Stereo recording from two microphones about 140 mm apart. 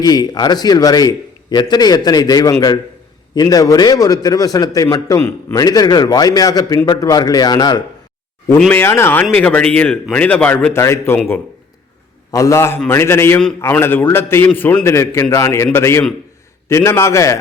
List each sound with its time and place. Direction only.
0.0 s a man's voice: 30° left (ahead or behind)
8.5 s speech: 5° left (ahead or behind)
8.8 s a man's voice: 15° left (ahead or behind)
12.3 s a man's voice: 25° left (ahead or behind)